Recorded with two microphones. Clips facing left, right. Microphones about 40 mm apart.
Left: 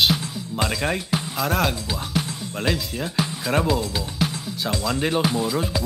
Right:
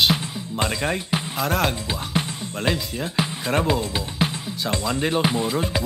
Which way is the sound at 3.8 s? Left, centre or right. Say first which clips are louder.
Right 1 dB; right.